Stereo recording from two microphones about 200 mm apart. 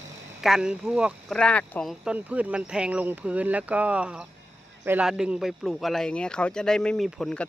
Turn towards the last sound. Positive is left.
turn(degrees=0)  # may be behind; listen again after turning